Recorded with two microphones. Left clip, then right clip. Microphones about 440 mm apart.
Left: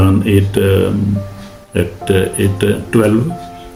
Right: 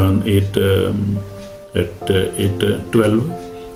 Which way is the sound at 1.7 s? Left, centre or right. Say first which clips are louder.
Left 3 dB; right.